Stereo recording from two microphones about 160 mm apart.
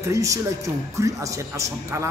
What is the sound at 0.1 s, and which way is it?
Speech, 20° right (ahead or behind).